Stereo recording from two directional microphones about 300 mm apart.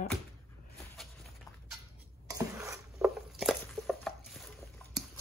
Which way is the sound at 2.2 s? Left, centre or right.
Centre.